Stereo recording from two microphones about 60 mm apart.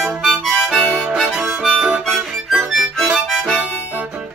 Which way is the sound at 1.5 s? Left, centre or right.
Centre.